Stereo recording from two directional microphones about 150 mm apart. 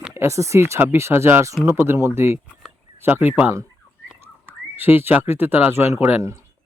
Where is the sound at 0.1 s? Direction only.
20° right (ahead or behind).